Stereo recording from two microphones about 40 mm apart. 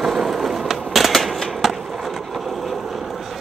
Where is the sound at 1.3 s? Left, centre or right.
Centre.